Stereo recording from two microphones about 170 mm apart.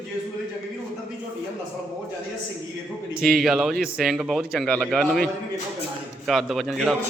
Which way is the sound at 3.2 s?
Centre (ahead or behind).